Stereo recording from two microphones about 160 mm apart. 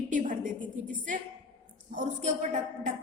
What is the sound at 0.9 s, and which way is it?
A woman's voice, 55° right (ahead or behind).